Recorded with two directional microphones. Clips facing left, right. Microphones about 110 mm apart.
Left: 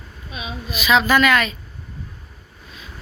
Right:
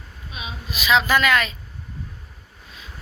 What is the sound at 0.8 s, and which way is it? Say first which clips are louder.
Speech: left 3 dB; 25° right (ahead or behind).